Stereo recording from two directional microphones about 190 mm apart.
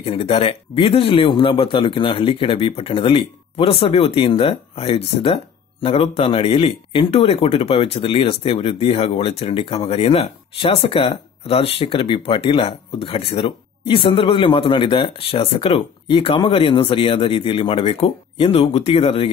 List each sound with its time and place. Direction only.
0.0 s speech: 30° left (ahead or behind)